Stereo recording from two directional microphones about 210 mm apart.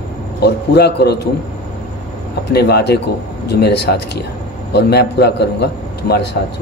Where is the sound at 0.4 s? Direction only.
50° left (ahead or behind).